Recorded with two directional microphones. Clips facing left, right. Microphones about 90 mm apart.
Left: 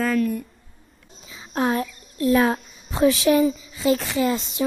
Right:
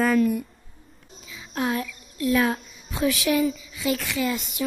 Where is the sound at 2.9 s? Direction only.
30° left (ahead or behind).